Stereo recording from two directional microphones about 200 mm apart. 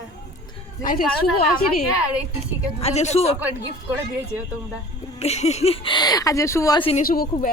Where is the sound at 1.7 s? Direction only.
5° right (ahead or behind).